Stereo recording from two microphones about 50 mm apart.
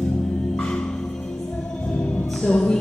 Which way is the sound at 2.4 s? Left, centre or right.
Centre.